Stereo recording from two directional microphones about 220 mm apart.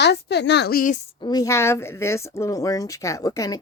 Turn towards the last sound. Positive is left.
turn(degrees=15)  # may be behind; listen again after turning